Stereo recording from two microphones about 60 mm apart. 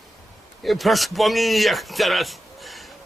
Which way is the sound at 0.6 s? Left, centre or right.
Centre.